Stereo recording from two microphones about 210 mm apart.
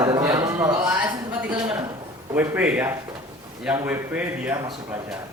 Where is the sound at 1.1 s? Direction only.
20° right (ahead or behind).